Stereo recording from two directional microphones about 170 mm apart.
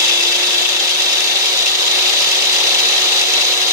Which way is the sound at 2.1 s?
20° right (ahead or behind).